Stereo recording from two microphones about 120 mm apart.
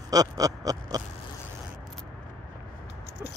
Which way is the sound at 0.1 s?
30° right (ahead or behind).